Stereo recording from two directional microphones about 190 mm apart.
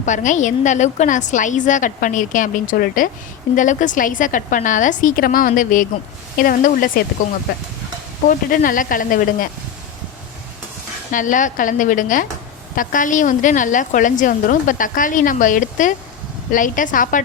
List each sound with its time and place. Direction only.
0.0 s a woman's voice: 40° left (ahead or behind)
8.3 s a woman's voice: 45° left (ahead or behind)
11.1 s a woman's voice: 45° left (ahead or behind)